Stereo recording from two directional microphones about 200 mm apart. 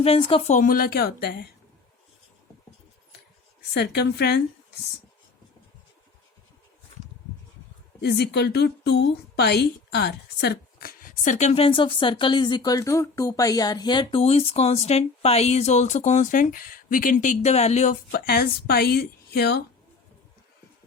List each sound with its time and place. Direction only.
0.0 s a woman's voice: 25° left (ahead or behind); by 1.5 s 55° left (ahead or behind)
3.8 s a woman's voice: 55° left (ahead or behind)
8.0 s a woman's voice: 55° left (ahead or behind); by 17.9 s 35° left (ahead or behind)
18.1 s a woman's voice: 50° left (ahead or behind)